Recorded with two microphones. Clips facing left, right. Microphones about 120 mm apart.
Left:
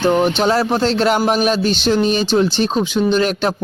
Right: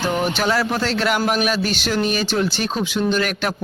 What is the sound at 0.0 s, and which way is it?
Speech, 25° left (ahead or behind).